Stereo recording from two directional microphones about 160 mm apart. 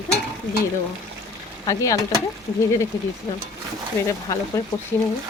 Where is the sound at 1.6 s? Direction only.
20° left (ahead or behind).